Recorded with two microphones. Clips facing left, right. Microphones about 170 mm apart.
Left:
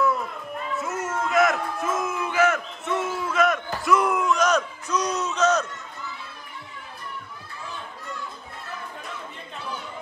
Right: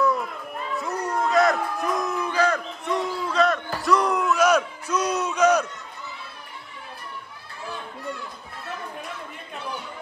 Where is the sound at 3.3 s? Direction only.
Centre (ahead or behind).